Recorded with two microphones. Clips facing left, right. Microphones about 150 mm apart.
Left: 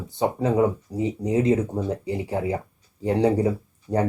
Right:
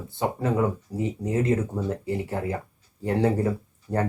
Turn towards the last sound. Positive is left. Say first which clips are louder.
# left 3 dB
turn(degrees=15)  # may be behind; listen again after turning